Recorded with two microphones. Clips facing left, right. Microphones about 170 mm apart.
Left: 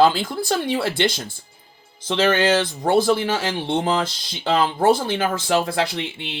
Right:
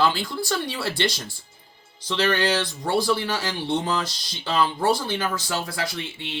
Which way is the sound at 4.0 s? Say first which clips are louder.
Left 5 dB; 55° left (ahead or behind).